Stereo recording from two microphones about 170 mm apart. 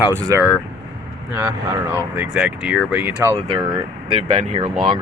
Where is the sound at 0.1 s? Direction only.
15° right (ahead or behind).